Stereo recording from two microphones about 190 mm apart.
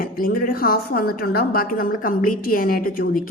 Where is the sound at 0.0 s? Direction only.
50° left (ahead or behind).